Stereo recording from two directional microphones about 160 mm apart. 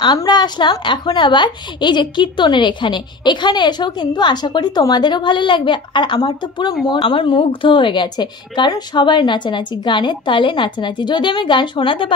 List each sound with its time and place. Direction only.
0.0 s speech: 30° left (ahead or behind)